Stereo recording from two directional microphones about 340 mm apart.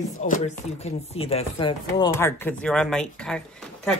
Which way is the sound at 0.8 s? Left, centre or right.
Centre.